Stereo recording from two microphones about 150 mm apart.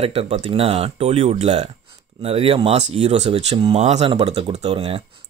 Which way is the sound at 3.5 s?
30° right (ahead or behind).